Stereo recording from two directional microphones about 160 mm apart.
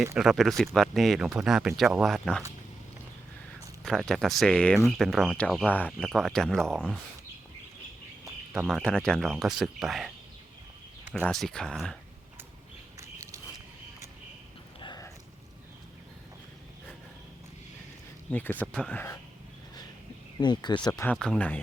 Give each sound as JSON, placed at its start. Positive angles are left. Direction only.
{"t": 0.2, "sound": "speech", "side_deg": 0}
{"t": 3.8, "sound": "speech", "side_deg": 0}
{"t": 5.6, "sound": "speech", "side_deg": 10}
{"t": 8.5, "sound": "speech", "side_deg": 0}
{"t": 11.1, "sound": "speech", "side_deg": 5}
{"t": 13.0, "sound": "a sound", "side_deg": -20}
{"t": 14.8, "sound": "a sound", "side_deg": 30}
{"t": 18.3, "sound": "speech", "side_deg": 10}
{"t": 20.4, "sound": "speech", "side_deg": 25}
{"t": 21.0, "sound": "speech", "side_deg": 5}